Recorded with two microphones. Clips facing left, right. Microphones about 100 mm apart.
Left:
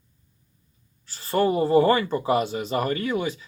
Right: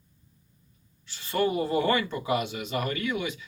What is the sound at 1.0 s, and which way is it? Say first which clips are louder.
Speech: left 5 dB; 40° left (ahead or behind).